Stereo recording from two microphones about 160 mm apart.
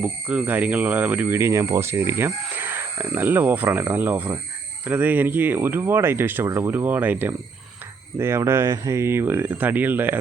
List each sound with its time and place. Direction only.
0.0 s speech: 10° right (ahead or behind)